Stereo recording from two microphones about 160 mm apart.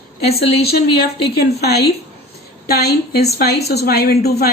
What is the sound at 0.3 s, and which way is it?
A woman's voice, 80° left.